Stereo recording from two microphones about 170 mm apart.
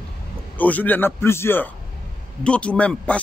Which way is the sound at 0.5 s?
10° left (ahead or behind).